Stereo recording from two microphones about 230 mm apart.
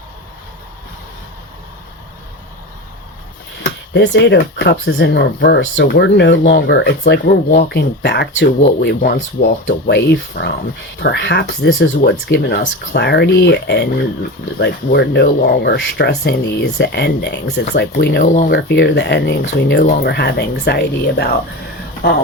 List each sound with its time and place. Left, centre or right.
3.6 s speech: left